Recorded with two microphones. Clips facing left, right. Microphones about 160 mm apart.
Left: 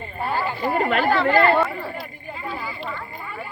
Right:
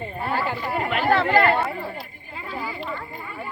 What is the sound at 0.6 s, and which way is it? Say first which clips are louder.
Speech: left 4 dB; 40° left (ahead or behind).